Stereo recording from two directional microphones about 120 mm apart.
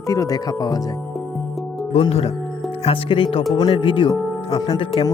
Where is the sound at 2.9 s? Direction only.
45° left (ahead or behind).